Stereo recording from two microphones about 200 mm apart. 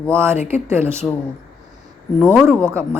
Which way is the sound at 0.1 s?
10° right (ahead or behind).